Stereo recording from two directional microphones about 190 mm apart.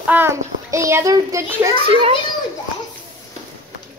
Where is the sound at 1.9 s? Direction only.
30° right (ahead or behind).